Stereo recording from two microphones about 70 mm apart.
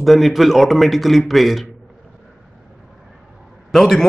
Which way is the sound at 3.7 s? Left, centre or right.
Centre.